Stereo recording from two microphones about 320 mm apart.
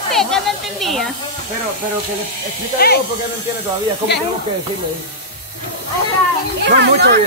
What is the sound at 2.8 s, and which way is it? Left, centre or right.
Speech, left.